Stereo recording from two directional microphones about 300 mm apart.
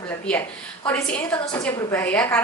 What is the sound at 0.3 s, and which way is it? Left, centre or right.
A woman's voice, centre.